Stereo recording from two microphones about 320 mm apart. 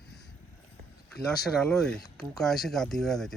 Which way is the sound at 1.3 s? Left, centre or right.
Centre.